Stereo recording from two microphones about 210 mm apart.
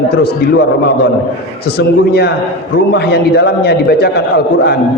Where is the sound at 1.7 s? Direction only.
50° left (ahead or behind).